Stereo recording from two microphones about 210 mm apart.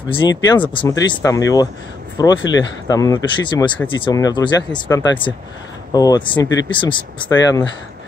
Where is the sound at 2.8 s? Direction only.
15° left (ahead or behind).